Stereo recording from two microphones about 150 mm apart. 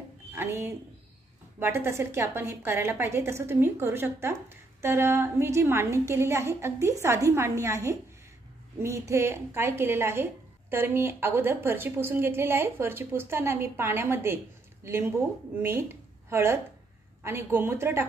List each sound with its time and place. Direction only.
0.3 s a woman's voice: 15° right (ahead or behind)